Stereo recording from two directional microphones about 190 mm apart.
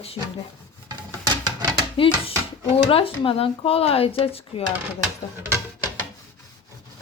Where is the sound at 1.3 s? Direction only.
20° right (ahead or behind).